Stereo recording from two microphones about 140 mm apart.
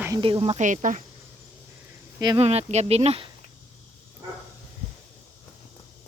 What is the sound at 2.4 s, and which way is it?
Speech, 50° right (ahead or behind).